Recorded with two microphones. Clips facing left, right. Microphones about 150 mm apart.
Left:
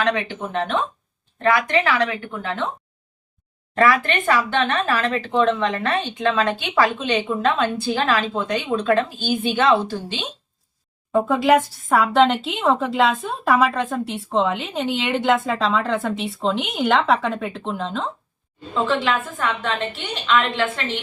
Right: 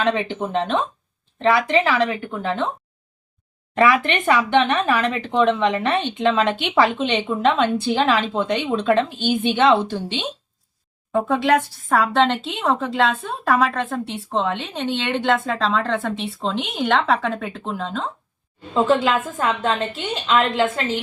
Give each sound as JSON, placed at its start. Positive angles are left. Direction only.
{"t": 0.0, "sound": "speech", "side_deg": -15}
{"t": 3.8, "sound": "speech", "side_deg": -20}
{"t": 11.1, "sound": "speech", "side_deg": 5}
{"t": 18.7, "sound": "a woman's voice", "side_deg": -40}